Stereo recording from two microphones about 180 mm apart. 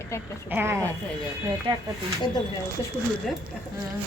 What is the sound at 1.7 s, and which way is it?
Speech, 25° right (ahead or behind).